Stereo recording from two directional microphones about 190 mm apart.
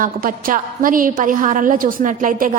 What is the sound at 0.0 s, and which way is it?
A woman's voice, 50° right (ahead or behind).